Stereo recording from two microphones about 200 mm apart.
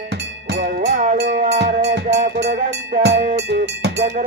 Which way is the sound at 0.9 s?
35° right (ahead or behind).